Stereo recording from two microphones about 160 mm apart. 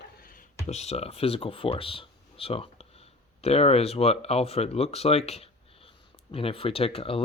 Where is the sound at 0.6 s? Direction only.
45° left (ahead or behind).